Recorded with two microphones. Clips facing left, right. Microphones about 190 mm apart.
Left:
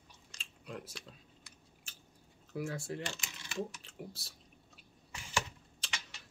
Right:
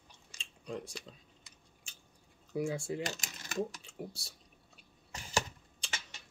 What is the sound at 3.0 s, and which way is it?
Speech, 40° right (ahead or behind).